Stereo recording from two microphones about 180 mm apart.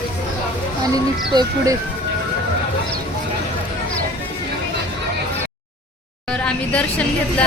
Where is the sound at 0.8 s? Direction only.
20° right (ahead or behind).